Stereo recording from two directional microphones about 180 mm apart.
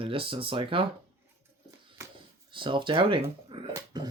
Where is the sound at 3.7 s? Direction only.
20° right (ahead or behind).